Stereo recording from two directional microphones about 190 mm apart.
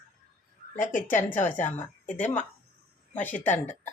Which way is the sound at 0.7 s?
40° left (ahead or behind).